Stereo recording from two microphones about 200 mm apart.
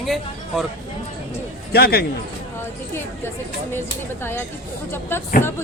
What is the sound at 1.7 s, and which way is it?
Speech, 55° left (ahead or behind).